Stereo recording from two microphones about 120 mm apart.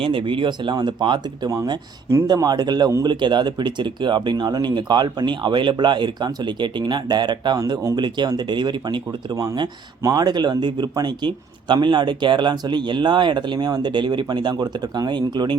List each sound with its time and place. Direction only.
0.0 s speech: 45° right (ahead or behind)